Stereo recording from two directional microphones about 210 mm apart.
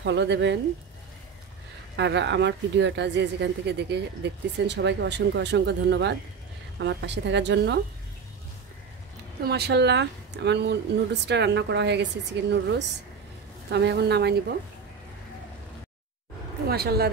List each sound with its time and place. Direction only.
0.0 s speech: 55° right (ahead or behind)
2.0 s speech: 55° right (ahead or behind)
9.4 s speech: 50° right (ahead or behind)
16.6 s speech: 50° right (ahead or behind)